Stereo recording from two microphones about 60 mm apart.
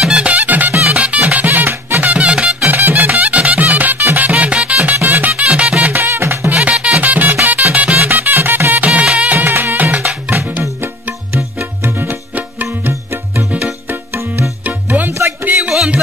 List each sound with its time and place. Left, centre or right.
0.0 s music: centre
0.3 s music: right
2.1 s music: centre
2.6 s music: right
4.3 s music: centre
6.0 s music: right
6.5 s music: centre
10.8 s music: right
15.6 s music: centre